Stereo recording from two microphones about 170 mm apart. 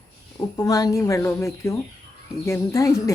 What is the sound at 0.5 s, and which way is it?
A woman's voice, 20° left (ahead or behind).